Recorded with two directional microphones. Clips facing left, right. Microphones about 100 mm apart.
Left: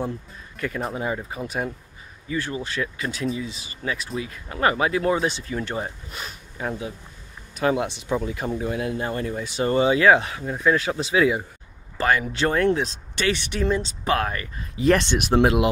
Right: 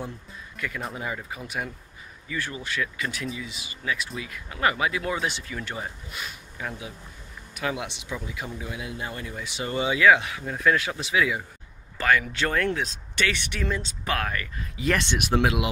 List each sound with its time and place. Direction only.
0.6 s speech: 35° left (ahead or behind)
10.4 s speech: 20° left (ahead or behind)
10.8 s speech: 30° left (ahead or behind)